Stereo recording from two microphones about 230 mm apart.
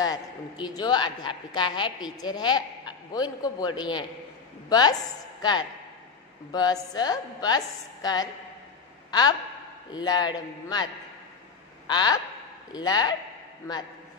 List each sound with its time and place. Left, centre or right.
0.0 s a woman's voice: centre
9.9 s a man's voice: centre
11.9 s a woman's voice: centre